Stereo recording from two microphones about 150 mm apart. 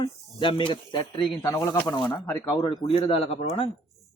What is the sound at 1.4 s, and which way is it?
Speech, 20° left (ahead or behind).